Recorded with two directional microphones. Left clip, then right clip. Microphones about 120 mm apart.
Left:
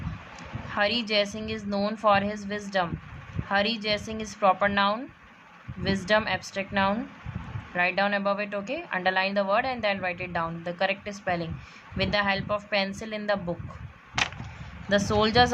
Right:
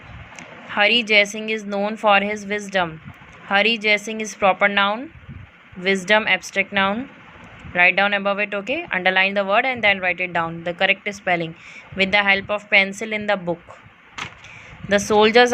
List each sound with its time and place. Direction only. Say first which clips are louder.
0.3 s a woman's voice: right 7 dB; 35° right (ahead or behind)
14.8 s a woman's voice: right 8 dB; 40° right (ahead or behind)